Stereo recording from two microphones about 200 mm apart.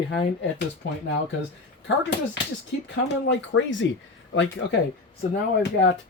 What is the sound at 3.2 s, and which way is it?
Speech, 65° left (ahead or behind).